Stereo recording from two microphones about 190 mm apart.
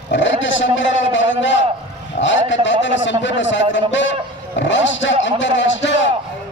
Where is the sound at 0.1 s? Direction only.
75° left (ahead or behind).